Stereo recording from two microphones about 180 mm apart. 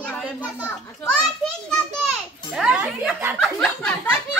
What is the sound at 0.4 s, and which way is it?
Speech, 10° left (ahead or behind).